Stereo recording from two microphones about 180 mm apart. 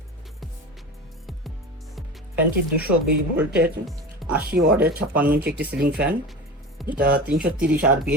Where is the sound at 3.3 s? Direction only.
10° right (ahead or behind).